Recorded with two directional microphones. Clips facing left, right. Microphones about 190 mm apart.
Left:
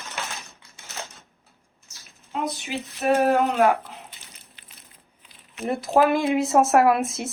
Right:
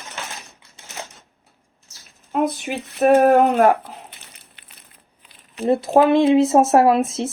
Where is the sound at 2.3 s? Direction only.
50° right (ahead or behind).